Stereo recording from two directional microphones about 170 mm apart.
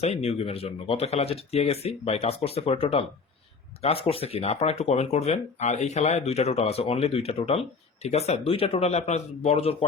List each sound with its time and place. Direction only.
0.0 s speech: 35° left (ahead or behind)